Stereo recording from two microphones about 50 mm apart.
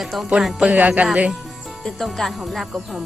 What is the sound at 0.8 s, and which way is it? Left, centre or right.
Speech, right.